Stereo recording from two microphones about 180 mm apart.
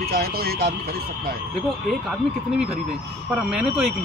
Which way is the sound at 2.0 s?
5° right (ahead or behind).